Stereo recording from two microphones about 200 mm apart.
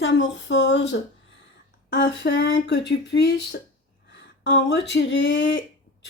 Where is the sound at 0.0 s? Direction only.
65° left (ahead or behind).